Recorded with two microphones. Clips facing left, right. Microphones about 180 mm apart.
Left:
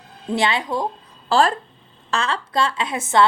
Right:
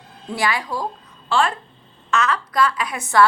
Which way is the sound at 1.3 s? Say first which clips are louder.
Left 3 dB; 40° left (ahead or behind).